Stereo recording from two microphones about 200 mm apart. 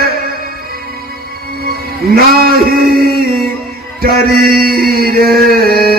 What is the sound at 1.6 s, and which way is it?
Music, 50° right (ahead or behind).